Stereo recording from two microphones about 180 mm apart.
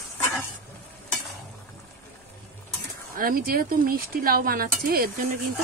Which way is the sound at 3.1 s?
50° right (ahead or behind).